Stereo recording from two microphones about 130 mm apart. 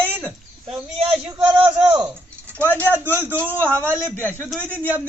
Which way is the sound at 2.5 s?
10° left (ahead or behind).